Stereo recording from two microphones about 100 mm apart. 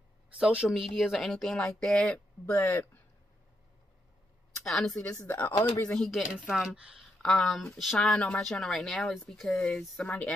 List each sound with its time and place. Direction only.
0.4 s speech: 10° right (ahead or behind); by 2.5 s 10° left (ahead or behind)
2.6 s speech: 20° left (ahead or behind)
4.6 s speech: 5° left (ahead or behind)
5.2 s speech: 20° left (ahead or behind)
5.8 s speech: 5° left (ahead or behind)
7.2 s speech: 5° left (ahead or behind)